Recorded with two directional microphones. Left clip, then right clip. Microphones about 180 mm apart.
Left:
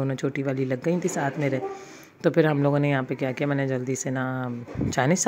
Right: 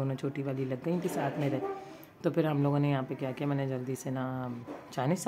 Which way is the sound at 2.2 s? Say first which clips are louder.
Left 9 dB; 25° left (ahead or behind).